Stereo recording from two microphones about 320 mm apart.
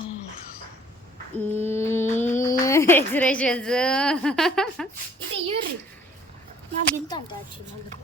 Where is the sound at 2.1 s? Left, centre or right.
Left.